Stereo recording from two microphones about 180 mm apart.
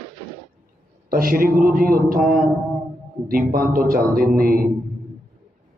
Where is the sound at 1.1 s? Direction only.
55° right (ahead or behind).